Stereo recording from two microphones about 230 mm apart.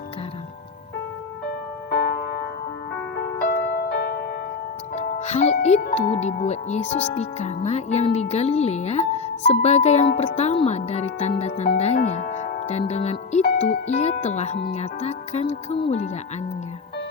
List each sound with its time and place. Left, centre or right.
1.9 s music: left
3.4 s music: left
4.9 s speech: left